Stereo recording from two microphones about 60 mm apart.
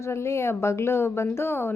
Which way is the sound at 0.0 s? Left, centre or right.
Left.